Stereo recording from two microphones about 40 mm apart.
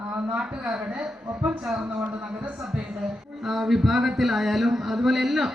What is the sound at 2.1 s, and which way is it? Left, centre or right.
Speech, right.